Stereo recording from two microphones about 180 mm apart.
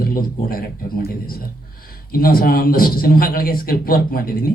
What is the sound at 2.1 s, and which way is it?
Speech, 55° left (ahead or behind).